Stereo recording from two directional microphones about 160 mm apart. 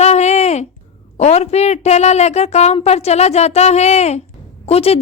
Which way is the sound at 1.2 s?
40° left (ahead or behind).